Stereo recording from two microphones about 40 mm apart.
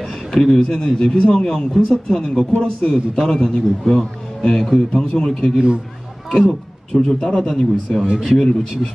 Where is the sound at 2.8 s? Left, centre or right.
Centre.